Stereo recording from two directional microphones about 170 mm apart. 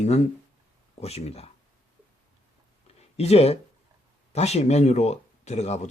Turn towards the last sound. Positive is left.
turn(degrees=40)  # may be behind; listen again after turning